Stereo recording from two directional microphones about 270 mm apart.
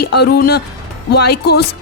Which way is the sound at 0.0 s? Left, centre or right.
Left.